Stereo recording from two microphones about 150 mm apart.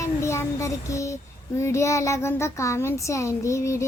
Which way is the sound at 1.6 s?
20° left (ahead or behind).